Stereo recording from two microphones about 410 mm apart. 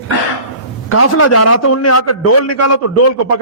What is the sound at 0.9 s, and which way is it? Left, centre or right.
A man's voice, left.